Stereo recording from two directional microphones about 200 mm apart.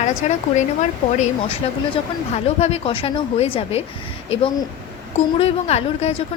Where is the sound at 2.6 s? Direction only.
30° left (ahead or behind).